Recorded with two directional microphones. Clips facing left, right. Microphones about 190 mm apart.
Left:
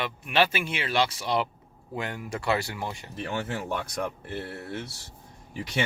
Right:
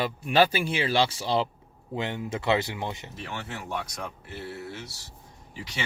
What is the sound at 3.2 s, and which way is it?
Speech, 50° left (ahead or behind).